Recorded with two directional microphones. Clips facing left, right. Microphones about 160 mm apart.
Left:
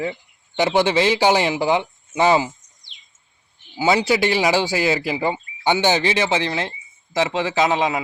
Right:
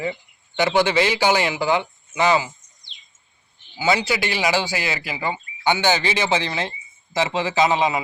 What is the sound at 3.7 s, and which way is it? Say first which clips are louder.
Speech: left 3 dB; 30° left (ahead or behind).